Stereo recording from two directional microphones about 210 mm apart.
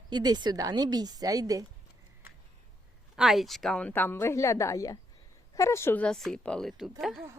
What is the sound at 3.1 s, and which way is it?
A woman's voice, centre (ahead or behind).